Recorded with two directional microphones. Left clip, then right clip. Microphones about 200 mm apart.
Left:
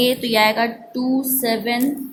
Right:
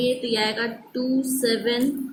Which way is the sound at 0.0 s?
40° left (ahead or behind).